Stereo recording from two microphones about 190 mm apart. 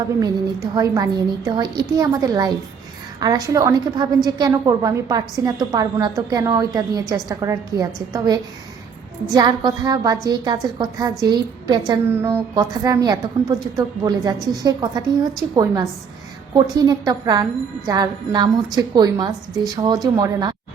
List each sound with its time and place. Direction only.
0.2 s a woman's voice: 20° right (ahead or behind)
9.3 s a woman's voice: 20° right (ahead or behind)